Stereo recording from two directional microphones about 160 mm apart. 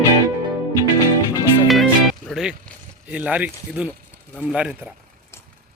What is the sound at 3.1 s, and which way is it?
A man's voice, 10° right (ahead or behind).